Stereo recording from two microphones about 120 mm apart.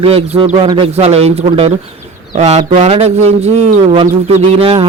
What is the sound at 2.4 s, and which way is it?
Speech, 75° right (ahead or behind).